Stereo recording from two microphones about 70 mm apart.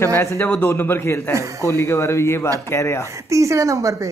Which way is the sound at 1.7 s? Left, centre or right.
Left.